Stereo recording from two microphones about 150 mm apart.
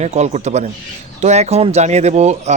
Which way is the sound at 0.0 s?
50° right (ahead or behind).